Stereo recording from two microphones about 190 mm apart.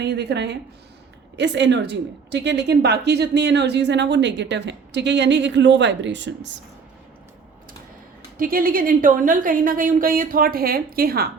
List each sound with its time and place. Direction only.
0.0 s a woman's voice: 65° right (ahead or behind)
8.4 s a woman's voice: 50° right (ahead or behind)